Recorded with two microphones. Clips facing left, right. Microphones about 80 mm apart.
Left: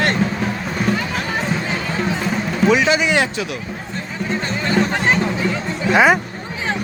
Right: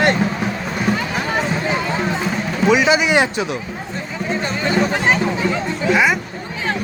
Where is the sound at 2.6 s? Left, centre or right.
Centre.